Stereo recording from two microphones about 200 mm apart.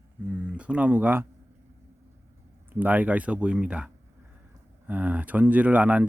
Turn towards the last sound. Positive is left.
turn(degrees=-5)  # may be behind; listen again after turning